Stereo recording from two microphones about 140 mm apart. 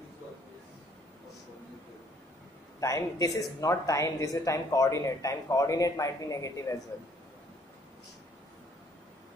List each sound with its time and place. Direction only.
2.8 s speech: 25° left (ahead or behind)